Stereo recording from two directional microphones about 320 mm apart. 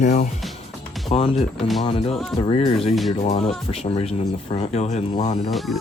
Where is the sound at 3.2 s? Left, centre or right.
Centre.